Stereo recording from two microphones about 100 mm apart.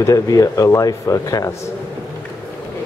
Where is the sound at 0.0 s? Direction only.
35° left (ahead or behind).